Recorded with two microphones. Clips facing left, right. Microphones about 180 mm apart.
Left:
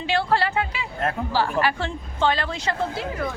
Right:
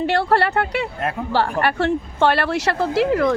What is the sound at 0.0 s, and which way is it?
A woman's voice, 65° right (ahead or behind).